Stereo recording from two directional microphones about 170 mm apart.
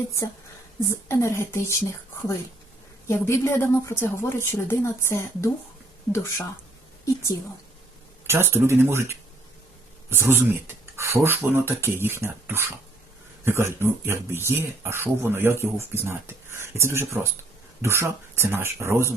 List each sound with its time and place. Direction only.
0.9 s a woman's voice: 15° left (ahead or behind)
8.3 s speech: 15° right (ahead or behind)